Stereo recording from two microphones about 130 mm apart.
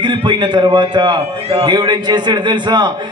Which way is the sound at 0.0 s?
35° right (ahead or behind).